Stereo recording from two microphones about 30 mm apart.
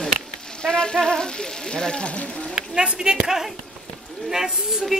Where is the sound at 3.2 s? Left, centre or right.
Centre.